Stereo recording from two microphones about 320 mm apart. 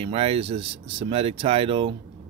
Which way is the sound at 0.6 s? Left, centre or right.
Right.